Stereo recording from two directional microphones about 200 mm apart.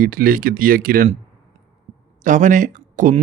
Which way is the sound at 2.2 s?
40° right (ahead or behind).